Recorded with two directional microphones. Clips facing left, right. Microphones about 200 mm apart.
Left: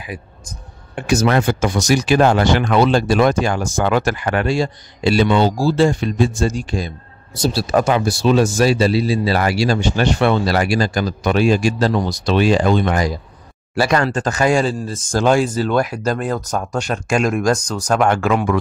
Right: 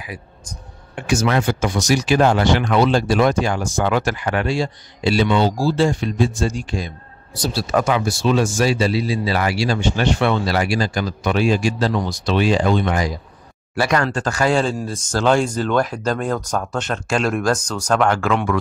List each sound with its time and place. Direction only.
0.9 s speech: 40° left (ahead or behind)
13.7 s speech: 30° left (ahead or behind)
14.1 s speech: 20° left (ahead or behind)